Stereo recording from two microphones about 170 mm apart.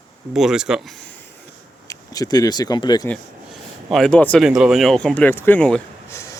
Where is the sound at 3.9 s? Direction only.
5° left (ahead or behind).